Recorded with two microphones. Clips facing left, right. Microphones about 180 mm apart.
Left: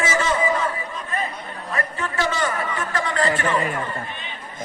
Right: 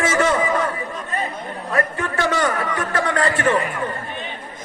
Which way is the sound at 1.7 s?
55° right (ahead or behind).